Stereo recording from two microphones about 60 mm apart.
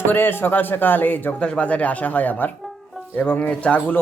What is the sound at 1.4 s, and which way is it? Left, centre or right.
Speech, centre.